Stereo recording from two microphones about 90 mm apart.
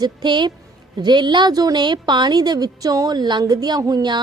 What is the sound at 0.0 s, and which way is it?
A woman's voice, 55° right (ahead or behind).